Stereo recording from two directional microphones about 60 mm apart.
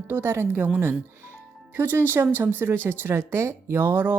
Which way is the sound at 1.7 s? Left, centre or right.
Right.